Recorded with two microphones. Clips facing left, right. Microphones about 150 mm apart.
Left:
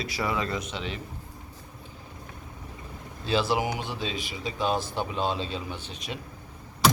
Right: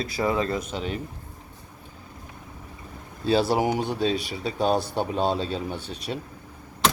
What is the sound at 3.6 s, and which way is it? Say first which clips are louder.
Speech: right 6 dB; 45° right (ahead or behind).